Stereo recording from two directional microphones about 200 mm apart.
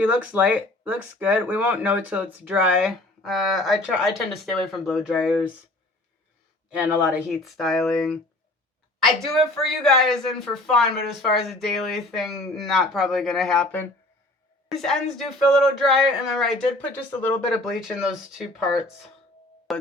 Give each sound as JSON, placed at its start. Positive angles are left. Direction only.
{"t": 0.0, "sound": "speech", "side_deg": -5}
{"t": 6.7, "sound": "speech", "side_deg": -10}
{"t": 9.3, "sound": "speech", "side_deg": 0}
{"t": 19.7, "sound": "music", "side_deg": 0}